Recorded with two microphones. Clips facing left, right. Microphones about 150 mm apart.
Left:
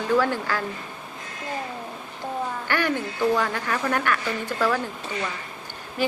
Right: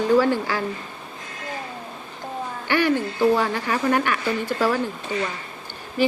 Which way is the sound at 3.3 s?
10° right (ahead or behind).